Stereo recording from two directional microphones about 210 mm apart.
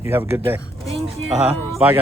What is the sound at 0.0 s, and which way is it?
Speech, 10° right (ahead or behind).